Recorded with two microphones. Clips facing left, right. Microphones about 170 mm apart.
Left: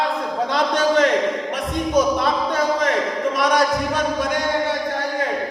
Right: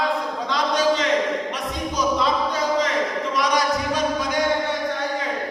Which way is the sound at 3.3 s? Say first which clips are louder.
Left 2 dB; 55° left (ahead or behind).